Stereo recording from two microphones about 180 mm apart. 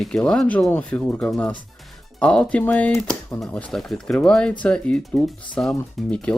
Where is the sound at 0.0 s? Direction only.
5° left (ahead or behind).